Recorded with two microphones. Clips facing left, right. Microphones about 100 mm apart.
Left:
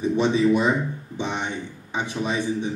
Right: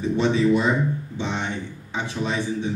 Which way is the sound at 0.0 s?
15° left (ahead or behind).